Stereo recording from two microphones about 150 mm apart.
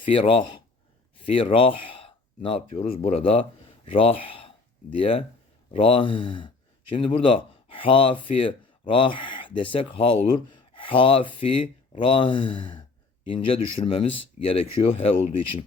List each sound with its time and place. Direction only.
0.0 s speech: 35° left (ahead or behind)